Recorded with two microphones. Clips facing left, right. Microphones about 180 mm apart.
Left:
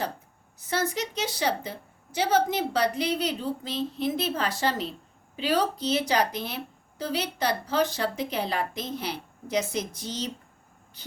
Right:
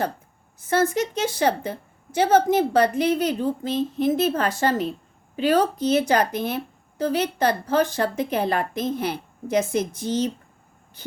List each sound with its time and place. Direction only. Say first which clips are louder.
0.6 s a woman's voice: right 7 dB; 50° right (ahead or behind)